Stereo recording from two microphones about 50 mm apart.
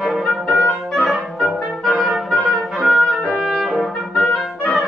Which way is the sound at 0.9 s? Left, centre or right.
Centre.